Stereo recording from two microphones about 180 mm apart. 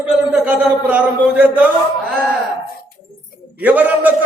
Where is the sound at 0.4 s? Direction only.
5° right (ahead or behind).